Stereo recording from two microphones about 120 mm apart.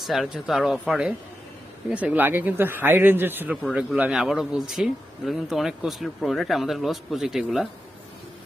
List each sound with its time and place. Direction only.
0.0 s speech: centre (ahead or behind)